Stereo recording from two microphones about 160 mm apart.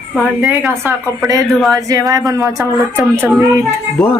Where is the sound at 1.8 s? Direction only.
20° right (ahead or behind).